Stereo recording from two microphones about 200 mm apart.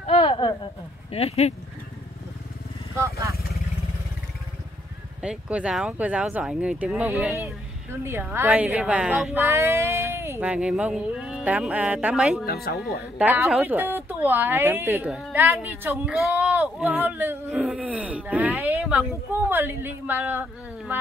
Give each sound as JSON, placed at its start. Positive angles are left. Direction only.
{"t": 0.0, "sound": "a sound", "side_deg": 30}
{"t": 1.1, "sound": "speech", "side_deg": 30}
{"t": 5.2, "sound": "a woman's voice", "side_deg": -5}
{"t": 12.6, "sound": "speech", "side_deg": 50}
{"t": 13.2, "sound": "a woman's voice", "side_deg": -10}